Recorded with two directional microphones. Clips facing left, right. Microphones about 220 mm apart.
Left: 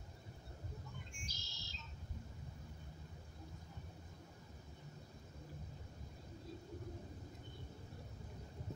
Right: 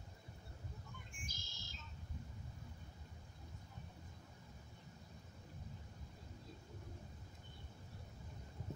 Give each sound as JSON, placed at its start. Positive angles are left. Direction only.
{"t": 1.1, "sound": "bird", "side_deg": -50}